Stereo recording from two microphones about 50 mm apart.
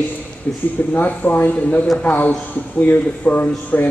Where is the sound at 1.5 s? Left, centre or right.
Left.